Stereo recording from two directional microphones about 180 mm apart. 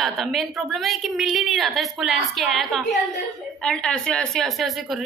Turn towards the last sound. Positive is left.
turn(degrees=0)  # may be behind; listen again after turning